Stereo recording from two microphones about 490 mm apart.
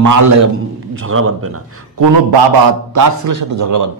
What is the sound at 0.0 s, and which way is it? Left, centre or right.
Speech, right.